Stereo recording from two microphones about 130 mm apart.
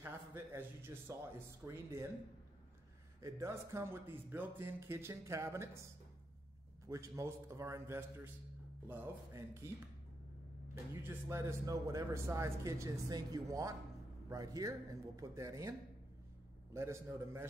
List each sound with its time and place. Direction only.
0.0 s a man's voice: 20° right (ahead or behind)
3.2 s speech: 25° right (ahead or behind)
6.9 s speech: 25° right (ahead or behind)
10.7 s speech: 20° right (ahead or behind)
16.7 s speech: 20° right (ahead or behind)